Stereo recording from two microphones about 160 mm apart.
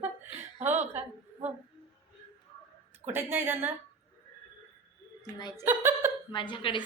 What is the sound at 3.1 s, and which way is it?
Speech, 15° right (ahead or behind).